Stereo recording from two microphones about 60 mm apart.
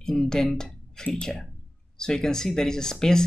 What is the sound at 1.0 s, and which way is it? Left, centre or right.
Speech, centre.